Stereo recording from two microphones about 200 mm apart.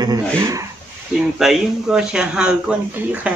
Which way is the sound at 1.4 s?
Centre (ahead or behind).